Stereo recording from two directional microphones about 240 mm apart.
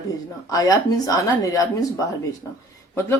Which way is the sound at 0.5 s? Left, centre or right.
Centre.